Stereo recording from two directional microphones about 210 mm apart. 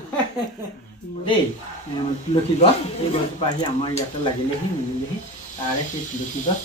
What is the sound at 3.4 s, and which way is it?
Speech, 20° left (ahead or behind).